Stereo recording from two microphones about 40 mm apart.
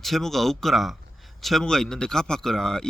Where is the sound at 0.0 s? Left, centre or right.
Centre.